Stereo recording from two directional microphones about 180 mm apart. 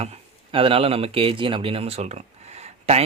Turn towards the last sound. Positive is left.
turn(degrees=-35)  # may be behind; listen again after turning